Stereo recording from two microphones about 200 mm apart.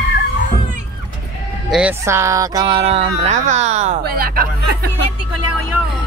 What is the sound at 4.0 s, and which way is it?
Speech, 50° right (ahead or behind).